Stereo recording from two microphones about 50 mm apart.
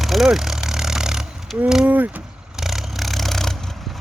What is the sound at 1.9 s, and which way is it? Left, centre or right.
Speech, right.